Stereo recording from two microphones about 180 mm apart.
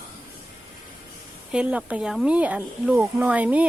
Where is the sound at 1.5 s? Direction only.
5° right (ahead or behind).